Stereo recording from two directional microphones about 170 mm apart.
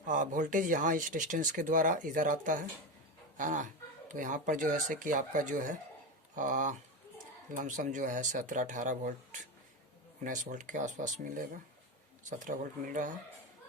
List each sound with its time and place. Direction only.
0.0 s speech: 50° right (ahead or behind)